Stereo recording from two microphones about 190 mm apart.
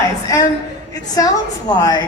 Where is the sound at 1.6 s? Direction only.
20° left (ahead or behind).